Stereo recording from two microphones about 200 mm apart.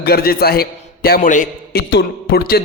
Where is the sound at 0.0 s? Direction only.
50° left (ahead or behind).